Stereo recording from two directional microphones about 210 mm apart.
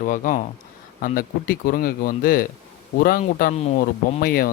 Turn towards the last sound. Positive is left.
turn(degrees=45)  # may be behind; listen again after turning